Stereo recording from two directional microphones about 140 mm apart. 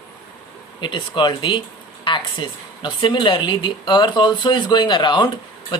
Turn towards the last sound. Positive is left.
turn(degrees=35)  # may be behind; listen again after turning